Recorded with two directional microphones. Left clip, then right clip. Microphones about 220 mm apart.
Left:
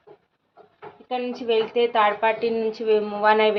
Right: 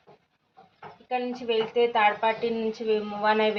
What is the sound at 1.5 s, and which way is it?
A woman's voice, 45° left (ahead or behind).